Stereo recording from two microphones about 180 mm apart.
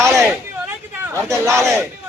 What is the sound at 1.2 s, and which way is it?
Speech, 15° right (ahead or behind).